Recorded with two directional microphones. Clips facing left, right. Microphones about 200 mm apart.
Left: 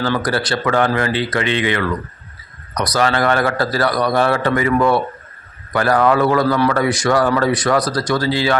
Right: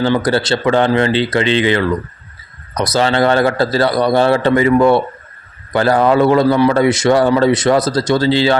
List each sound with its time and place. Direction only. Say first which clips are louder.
0.0 s a man's voice: right 5 dB; 25° right (ahead or behind)